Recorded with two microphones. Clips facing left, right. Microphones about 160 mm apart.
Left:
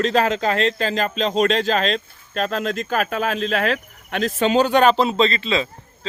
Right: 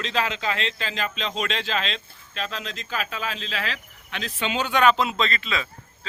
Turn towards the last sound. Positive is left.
turn(degrees=30)  # may be behind; listen again after turning